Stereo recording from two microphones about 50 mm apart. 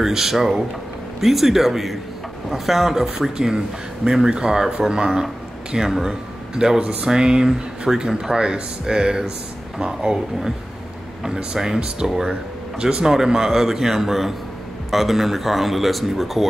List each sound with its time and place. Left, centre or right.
0.0 s speech: centre
6.8 s speech: right; by 16.4 s centre